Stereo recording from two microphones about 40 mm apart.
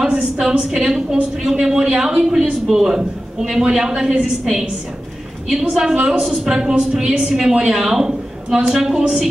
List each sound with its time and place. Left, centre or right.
0.0 s a woman's voice: centre